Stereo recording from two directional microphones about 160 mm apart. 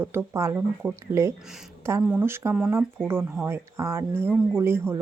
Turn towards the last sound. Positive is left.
turn(degrees=-15)  # may be behind; listen again after turning